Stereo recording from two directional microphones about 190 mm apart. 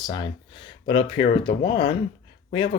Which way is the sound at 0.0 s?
25° left (ahead or behind).